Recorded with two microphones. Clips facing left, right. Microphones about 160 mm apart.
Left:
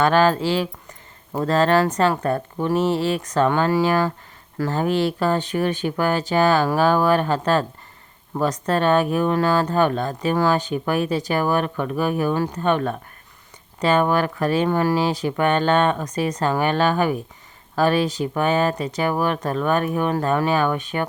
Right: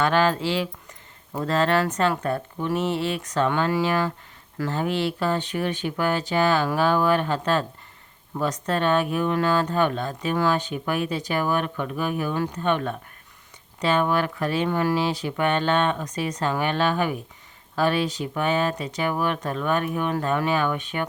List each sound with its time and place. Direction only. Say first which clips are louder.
0.0 s speech: left 4 dB; 40° left (ahead or behind)